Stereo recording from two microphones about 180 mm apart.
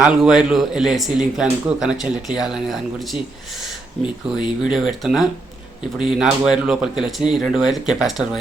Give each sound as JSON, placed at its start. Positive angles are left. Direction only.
{"t": 0.0, "sound": "speech", "side_deg": -5}
{"t": 4.0, "sound": "speech", "side_deg": 25}
{"t": 4.6, "sound": "speech", "side_deg": -5}